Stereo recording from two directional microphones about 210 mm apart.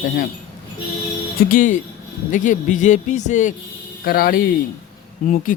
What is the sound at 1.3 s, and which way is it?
Speech, 40° left (ahead or behind).